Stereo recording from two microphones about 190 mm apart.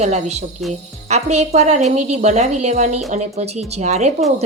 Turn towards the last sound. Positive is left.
turn(degrees=-35)  # may be behind; listen again after turning